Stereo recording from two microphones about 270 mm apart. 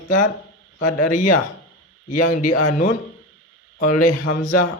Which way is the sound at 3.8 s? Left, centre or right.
Left.